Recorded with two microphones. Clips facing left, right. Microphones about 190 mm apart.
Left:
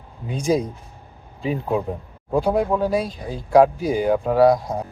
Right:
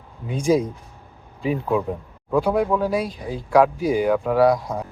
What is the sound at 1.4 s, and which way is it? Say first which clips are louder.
Speech: right 1 dB; 30° left (ahead or behind).